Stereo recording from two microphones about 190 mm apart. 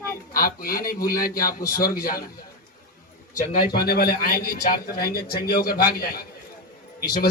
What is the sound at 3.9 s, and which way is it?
A man's voice, 55° left (ahead or behind).